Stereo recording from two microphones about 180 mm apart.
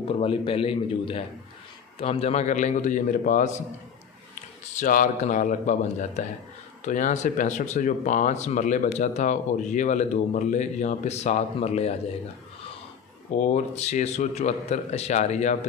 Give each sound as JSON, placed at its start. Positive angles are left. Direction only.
{"t": 0.2, "sound": "speech", "side_deg": 30}
{"t": 4.7, "sound": "speech", "side_deg": 45}
{"t": 13.4, "sound": "speech", "side_deg": 40}